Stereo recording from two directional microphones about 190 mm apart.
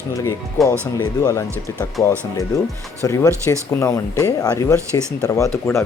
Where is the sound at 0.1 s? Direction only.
15° left (ahead or behind).